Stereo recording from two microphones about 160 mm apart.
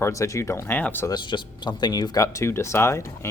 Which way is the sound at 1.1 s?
30° left (ahead or behind).